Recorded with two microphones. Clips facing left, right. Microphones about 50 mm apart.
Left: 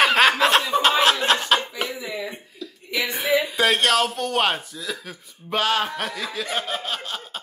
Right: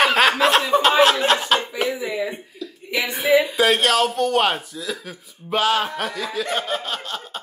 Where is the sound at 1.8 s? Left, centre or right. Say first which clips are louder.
Right 6 dB; centre.